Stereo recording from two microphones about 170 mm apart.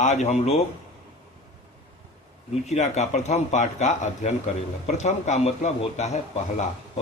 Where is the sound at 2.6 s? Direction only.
40° left (ahead or behind).